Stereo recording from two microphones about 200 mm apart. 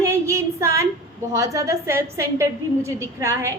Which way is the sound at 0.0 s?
15° right (ahead or behind).